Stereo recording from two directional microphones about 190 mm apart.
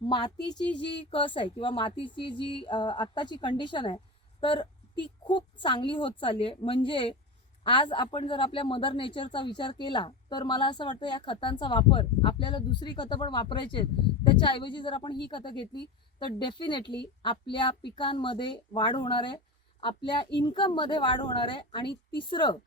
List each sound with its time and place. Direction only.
0.0 s speech: 20° left (ahead or behind)